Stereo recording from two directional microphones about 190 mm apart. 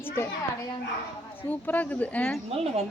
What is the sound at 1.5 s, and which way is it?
Speech, 10° left (ahead or behind).